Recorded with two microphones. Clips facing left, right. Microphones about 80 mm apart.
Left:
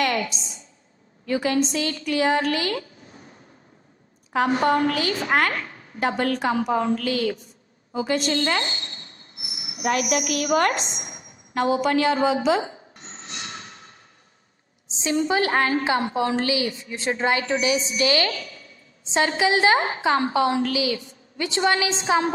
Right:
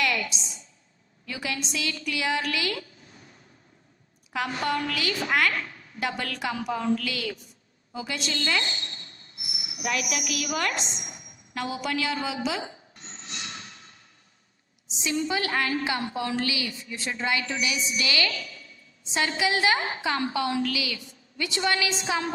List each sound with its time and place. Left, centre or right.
0.0 s a sound: left
1.2 s a woman's voice: left
4.3 s a woman's voice: left
11.5 s rub: left
14.9 s a woman's voice: left